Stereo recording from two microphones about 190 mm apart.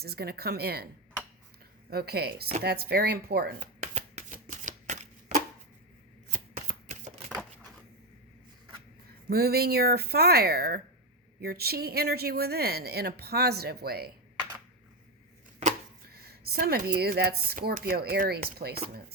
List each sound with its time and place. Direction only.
0.0 s speech: 55° right (ahead or behind)
1.9 s speech: 55° right (ahead or behind)
3.6 s shuffling cards: 40° right (ahead or behind)
9.3 s speech: 55° right (ahead or behind)
16.1 s speech: 55° right (ahead or behind)